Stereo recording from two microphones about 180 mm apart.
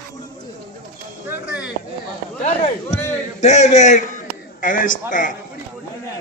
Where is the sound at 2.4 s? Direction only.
40° left (ahead or behind).